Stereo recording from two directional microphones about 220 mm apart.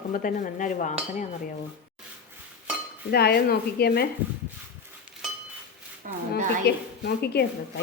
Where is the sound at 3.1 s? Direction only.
45° left (ahead or behind).